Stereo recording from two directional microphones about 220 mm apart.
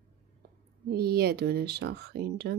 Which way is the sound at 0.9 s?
45° right (ahead or behind).